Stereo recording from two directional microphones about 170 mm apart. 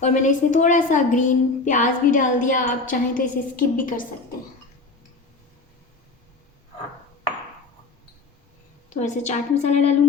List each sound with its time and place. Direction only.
0.0 s a woman's voice: 45° left (ahead or behind)
9.0 s a woman's voice: 45° left (ahead or behind)